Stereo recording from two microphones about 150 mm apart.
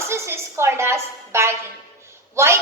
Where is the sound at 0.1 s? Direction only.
15° right (ahead or behind).